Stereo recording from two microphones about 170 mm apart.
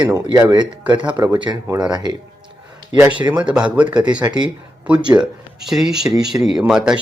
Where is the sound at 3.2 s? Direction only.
10° right (ahead or behind).